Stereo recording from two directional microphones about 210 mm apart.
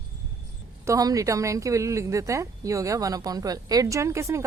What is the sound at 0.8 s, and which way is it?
Speech, 15° right (ahead or behind).